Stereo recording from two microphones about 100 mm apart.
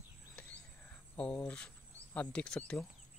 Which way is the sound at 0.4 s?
15° left (ahead or behind).